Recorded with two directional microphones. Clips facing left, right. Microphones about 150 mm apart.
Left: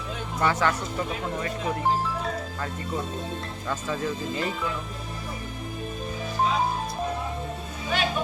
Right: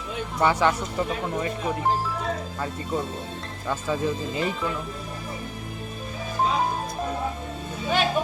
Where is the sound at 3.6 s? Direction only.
15° right (ahead or behind).